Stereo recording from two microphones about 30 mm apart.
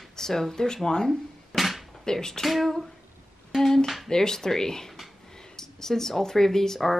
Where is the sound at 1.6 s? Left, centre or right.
Centre.